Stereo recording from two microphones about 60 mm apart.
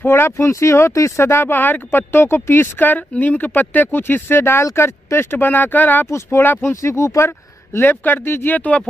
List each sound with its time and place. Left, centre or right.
0.0 s speech: left
6.0 s speech: left
6.4 s speech: left
6.7 s speech: left
7.8 s speech: left